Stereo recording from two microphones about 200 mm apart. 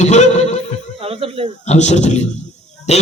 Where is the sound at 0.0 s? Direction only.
35° left (ahead or behind).